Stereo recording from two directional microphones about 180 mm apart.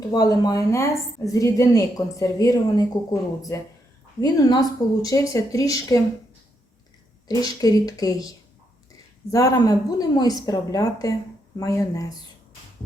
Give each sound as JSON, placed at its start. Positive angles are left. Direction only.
{"t": 0.1, "sound": "a woman's voice", "side_deg": 20}
{"t": 7.3, "sound": "a woman's voice", "side_deg": 20}